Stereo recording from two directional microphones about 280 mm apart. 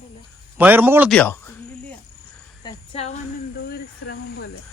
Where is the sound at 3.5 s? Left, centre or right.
Left.